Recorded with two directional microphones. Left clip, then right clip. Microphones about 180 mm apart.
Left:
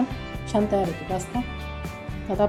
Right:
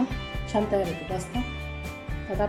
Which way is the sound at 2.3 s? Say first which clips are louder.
Left 5 dB; 40° left (ahead or behind).